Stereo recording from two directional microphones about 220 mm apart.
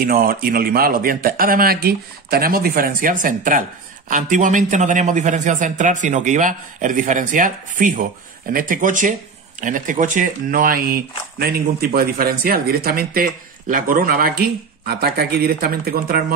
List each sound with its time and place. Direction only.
0.0 s a man's voice: 40° right (ahead or behind)